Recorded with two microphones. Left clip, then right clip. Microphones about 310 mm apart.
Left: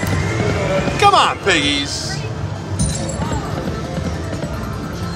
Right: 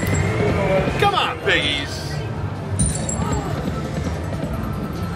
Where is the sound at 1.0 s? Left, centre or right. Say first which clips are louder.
Left 6 dB; left.